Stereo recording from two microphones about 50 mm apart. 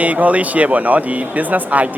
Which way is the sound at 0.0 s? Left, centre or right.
Right.